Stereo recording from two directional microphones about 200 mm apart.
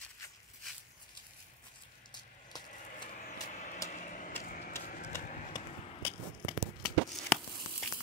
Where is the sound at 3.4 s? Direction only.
40° left (ahead or behind).